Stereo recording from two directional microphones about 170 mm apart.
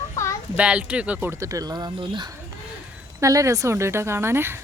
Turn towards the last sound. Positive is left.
turn(degrees=-15)  # may be behind; listen again after turning